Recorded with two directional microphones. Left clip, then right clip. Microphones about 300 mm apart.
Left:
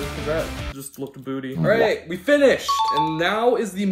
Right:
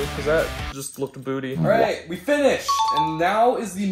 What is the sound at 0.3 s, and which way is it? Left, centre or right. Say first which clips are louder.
Speech: right 5 dB; centre.